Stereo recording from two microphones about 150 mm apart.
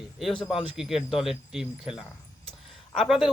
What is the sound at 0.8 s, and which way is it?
Speech, centre (ahead or behind).